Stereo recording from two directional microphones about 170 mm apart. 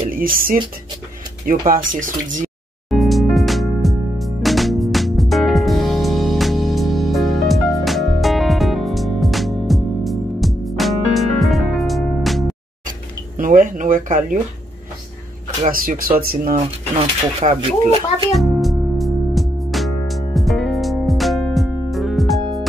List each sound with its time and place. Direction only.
0.1 s speech: 55° right (ahead or behind)
1.7 s speech: 50° right (ahead or behind)
2.9 s music: centre (ahead or behind)
13.4 s a sound: 50° right (ahead or behind)
15.6 s speech: 55° right (ahead or behind)
17.4 s speech: 35° right (ahead or behind)
18.3 s music: centre (ahead or behind)